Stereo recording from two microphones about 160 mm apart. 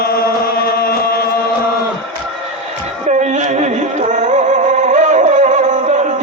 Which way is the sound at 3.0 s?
45° right (ahead or behind).